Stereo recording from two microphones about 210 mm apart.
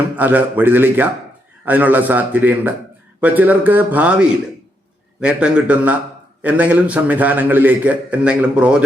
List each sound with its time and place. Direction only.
0.2 s a man's voice: 10° right (ahead or behind)